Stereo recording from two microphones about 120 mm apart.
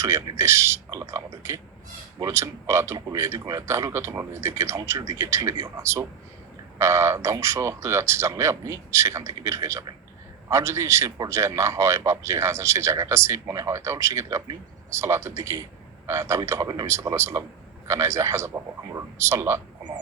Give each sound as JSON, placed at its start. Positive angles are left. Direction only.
{"t": 0.0, "sound": "a man's voice", "side_deg": -25}